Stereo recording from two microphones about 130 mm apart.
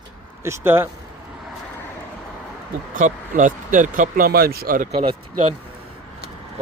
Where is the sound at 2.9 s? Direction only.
85° right.